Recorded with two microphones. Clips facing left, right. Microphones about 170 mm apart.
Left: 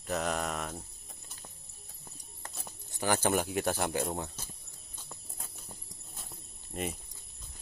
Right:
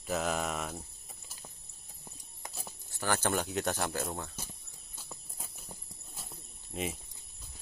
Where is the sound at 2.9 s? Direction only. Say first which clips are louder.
Left 3 dB; 15° left (ahead or behind).